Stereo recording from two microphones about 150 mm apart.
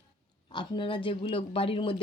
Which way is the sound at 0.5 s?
35° left (ahead or behind).